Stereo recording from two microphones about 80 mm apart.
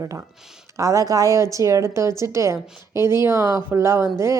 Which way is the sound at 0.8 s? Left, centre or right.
Right.